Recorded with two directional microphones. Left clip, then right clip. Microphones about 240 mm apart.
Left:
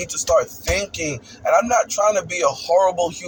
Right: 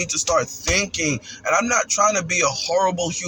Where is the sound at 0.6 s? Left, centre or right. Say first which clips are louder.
Right 1 dB; centre.